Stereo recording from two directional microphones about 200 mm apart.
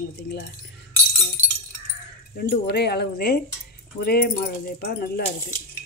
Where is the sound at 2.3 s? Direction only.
55° left (ahead or behind).